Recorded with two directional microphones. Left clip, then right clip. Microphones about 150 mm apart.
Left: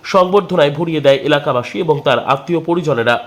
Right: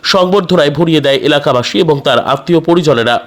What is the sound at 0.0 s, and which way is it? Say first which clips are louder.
A man's voice: right 2 dB; 45° right (ahead or behind).